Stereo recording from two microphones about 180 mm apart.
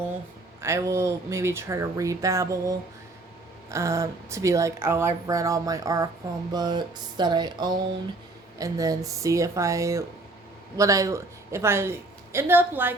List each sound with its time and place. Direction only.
0.6 s speech: 15° right (ahead or behind)
6.5 s a sound: 25° right (ahead or behind)
8.5 s speech: 20° right (ahead or behind)